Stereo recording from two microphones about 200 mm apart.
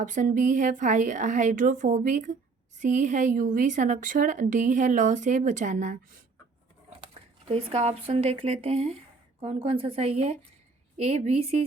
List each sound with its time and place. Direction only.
0.0 s a woman's voice: 40° right (ahead or behind)
7.0 s a sound: 25° right (ahead or behind)
7.7 s a woman's voice: 30° right (ahead or behind)